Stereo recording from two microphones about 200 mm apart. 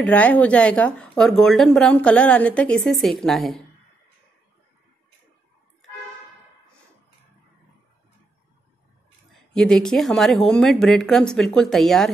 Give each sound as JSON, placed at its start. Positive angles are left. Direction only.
{"t": 0.0, "sound": "a woman's voice", "side_deg": 5}
{"t": 9.5, "sound": "a woman's voice", "side_deg": 5}